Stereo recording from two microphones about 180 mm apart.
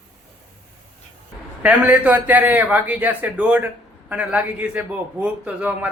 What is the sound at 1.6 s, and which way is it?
A man's voice, 10° right (ahead or behind).